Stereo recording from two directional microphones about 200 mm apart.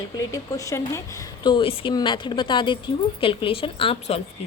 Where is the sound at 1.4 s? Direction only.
25° left (ahead or behind).